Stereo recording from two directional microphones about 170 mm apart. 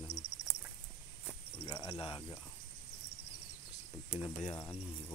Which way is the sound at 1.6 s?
30° left (ahead or behind).